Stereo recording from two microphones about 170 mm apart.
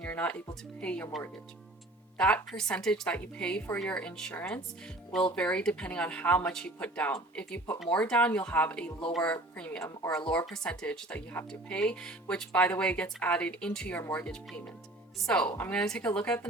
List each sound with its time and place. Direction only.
0.0 s a woman's voice: 10° left (ahead or behind)
10.3 s a woman's voice: 5° left (ahead or behind)